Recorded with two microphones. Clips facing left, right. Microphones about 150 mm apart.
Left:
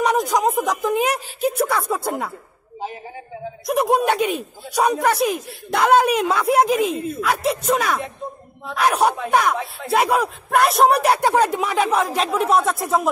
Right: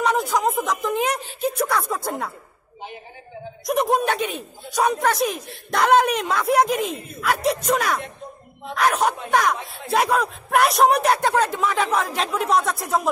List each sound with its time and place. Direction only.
0.0 s a sound: 15° left (ahead or behind)
0.4 s a woman's voice: 10° left (ahead or behind)
3.9 s a woman's voice: 10° left (ahead or behind)